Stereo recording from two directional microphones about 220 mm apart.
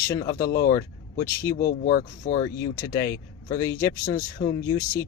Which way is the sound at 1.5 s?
45° left (ahead or behind).